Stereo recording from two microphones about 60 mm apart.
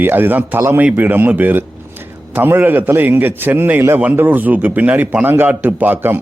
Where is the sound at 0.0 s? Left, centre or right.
Right.